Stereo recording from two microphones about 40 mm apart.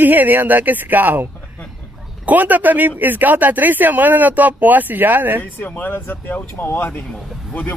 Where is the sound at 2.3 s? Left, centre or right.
Right.